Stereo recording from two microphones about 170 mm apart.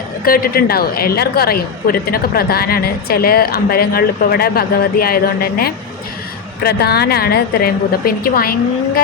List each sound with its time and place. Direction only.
0.3 s a woman's voice: 60° left (ahead or behind)